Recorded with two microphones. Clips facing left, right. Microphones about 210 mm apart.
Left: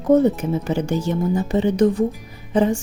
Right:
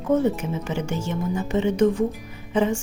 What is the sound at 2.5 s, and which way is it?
Music, 40° left (ahead or behind).